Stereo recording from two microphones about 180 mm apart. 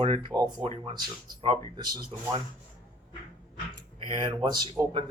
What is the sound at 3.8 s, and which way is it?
Speech, 25° right (ahead or behind).